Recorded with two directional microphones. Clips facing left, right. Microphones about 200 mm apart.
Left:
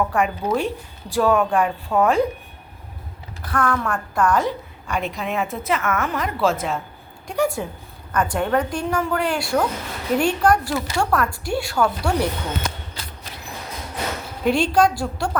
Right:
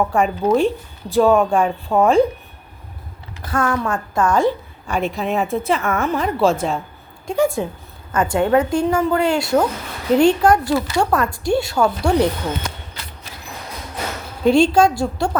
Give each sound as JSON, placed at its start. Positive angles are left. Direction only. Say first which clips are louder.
{"t": 0.1, "sound": "a woman's voice", "louder": "right 5 dB", "side_deg": -25}
{"t": 3.5, "sound": "a woman's voice", "louder": "right 2 dB", "side_deg": -25}
{"t": 14.4, "sound": "a woman's voice", "louder": "right 5 dB", "side_deg": -25}